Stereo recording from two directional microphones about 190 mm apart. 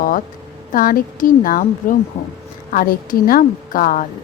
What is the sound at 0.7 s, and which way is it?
A woman's voice, 50° left (ahead or behind).